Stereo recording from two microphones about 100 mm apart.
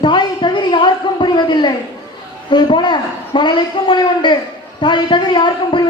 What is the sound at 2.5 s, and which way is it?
A man's voice, 50° left (ahead or behind).